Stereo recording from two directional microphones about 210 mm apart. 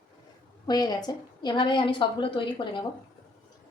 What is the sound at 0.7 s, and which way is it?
A woman's voice, 20° left (ahead or behind).